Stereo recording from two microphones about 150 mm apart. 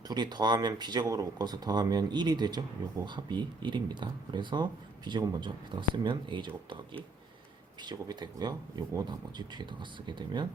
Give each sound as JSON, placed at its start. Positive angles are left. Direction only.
{"t": 0.1, "sound": "speech", "side_deg": -30}
{"t": 7.8, "sound": "speech", "side_deg": -30}